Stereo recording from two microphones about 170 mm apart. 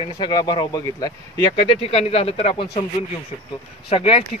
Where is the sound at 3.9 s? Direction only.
30° left (ahead or behind).